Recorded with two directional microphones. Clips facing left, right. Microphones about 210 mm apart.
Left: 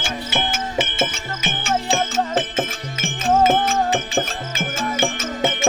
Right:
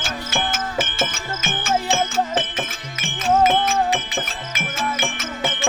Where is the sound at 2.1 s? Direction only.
25° left (ahead or behind).